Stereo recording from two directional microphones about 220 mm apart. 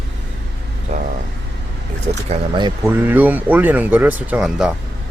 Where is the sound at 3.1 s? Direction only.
10° right (ahead or behind).